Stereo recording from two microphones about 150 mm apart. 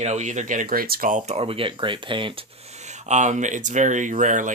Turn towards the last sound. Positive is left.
turn(degrees=-55)  # may be behind; listen again after turning